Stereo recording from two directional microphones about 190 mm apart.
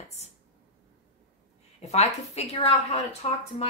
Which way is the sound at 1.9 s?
35° left (ahead or behind).